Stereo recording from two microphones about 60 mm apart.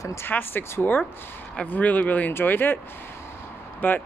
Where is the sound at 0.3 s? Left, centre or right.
Left.